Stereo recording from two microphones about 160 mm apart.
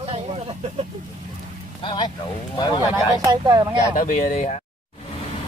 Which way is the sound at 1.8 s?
30° left (ahead or behind).